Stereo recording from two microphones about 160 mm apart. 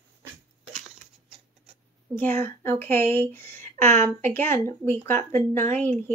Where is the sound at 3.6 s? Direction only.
50° right (ahead or behind).